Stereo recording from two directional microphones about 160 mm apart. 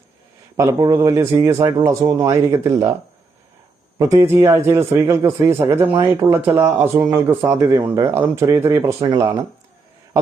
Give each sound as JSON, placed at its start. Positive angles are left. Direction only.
{"t": 0.5, "sound": "speech", "side_deg": -20}
{"t": 3.9, "sound": "speech", "side_deg": -20}